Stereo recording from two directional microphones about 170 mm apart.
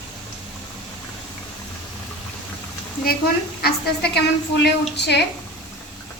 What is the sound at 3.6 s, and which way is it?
A woman's voice, 70° left (ahead or behind).